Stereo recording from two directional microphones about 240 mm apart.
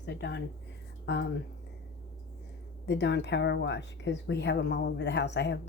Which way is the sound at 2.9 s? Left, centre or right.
Left.